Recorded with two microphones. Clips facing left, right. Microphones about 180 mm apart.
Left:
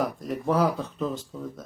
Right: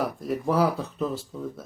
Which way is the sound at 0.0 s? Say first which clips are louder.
Right 1 dB; centre (ahead or behind).